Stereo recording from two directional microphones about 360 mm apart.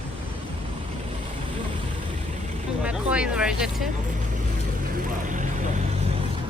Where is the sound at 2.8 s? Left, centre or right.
Centre.